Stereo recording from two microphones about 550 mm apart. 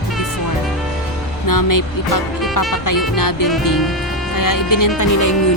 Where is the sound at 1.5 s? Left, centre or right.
Left.